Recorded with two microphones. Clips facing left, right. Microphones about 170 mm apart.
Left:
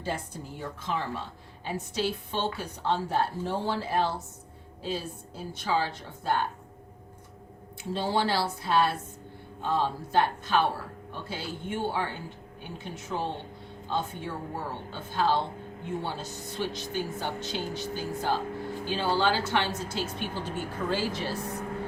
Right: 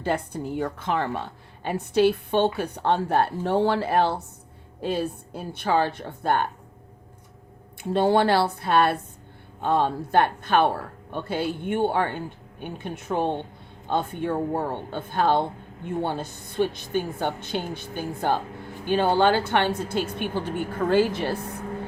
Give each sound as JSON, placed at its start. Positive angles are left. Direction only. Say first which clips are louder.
{"t": 0.0, "sound": "a woman's voice", "louder": "right 8 dB", "side_deg": -60}
{"t": 7.8, "sound": "a woman's voice", "louder": "right 8 dB", "side_deg": -55}